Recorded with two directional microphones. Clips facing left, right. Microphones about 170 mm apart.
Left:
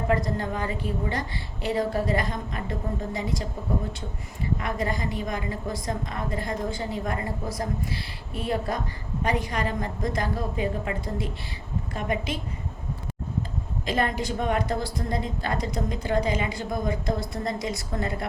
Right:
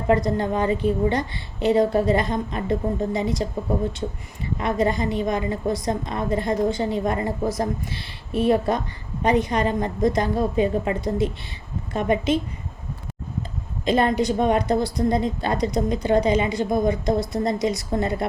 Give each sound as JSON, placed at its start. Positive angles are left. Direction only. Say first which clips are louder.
{"t": 0.1, "sound": "a woman's voice", "louder": "right 8 dB", "side_deg": -25}
{"t": 4.5, "sound": "a woman's voice", "louder": "right 7 dB", "side_deg": -25}
{"t": 13.8, "sound": "a woman's voice", "louder": "right 7 dB", "side_deg": -20}